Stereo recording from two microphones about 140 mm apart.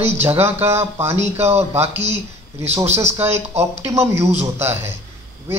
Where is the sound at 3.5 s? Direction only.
50° right (ahead or behind).